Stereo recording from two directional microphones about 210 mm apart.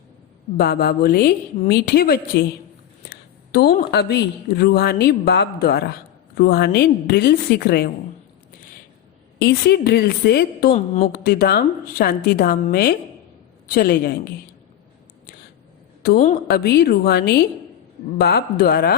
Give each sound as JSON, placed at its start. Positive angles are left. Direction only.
{"t": 0.5, "sound": "speech", "side_deg": 45}
{"t": 9.4, "sound": "speech", "side_deg": 50}
{"t": 10.8, "sound": "speech", "side_deg": 35}
{"t": 11.1, "sound": "speech", "side_deg": 45}
{"t": 16.0, "sound": "speech", "side_deg": 40}